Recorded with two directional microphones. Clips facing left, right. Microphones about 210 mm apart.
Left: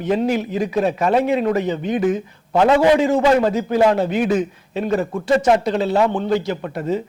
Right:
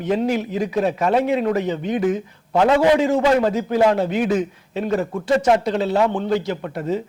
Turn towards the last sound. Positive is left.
turn(degrees=20)  # may be behind; listen again after turning